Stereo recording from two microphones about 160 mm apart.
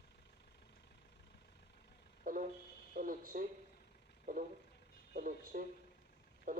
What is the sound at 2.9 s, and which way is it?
Speech, 60° right (ahead or behind).